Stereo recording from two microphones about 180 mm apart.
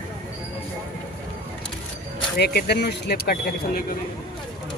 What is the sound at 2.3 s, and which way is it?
Speech, 65° left (ahead or behind).